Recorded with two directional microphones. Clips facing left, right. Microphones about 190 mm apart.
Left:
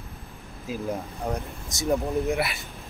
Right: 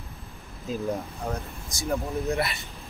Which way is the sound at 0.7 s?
10° left (ahead or behind).